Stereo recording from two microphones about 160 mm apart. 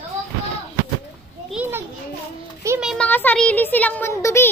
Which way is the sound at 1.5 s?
10° right (ahead or behind).